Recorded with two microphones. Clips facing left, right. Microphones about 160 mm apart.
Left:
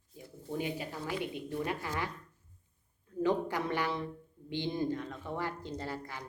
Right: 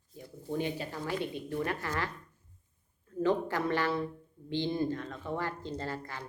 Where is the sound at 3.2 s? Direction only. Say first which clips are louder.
Right 2 dB; 15° left (ahead or behind).